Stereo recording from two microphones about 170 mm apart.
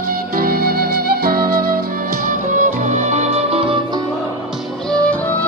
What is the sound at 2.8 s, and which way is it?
Music, 45° right (ahead or behind).